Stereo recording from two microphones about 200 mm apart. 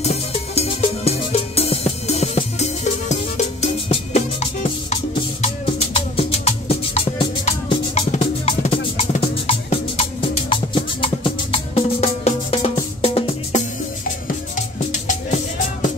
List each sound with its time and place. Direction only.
0.0 s music: 30° left (ahead or behind)
14.9 s music: 40° left (ahead or behind)